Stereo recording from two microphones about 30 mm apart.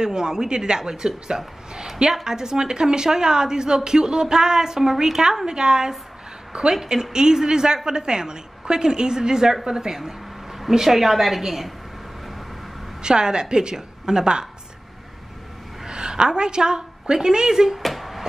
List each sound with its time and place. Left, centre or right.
0.0 s a woman's voice: right
10.0 s a sound: centre
10.9 s a woman's voice: centre
13.0 s a woman's voice: right
15.8 s a woman's voice: right
17.8 s a sound: centre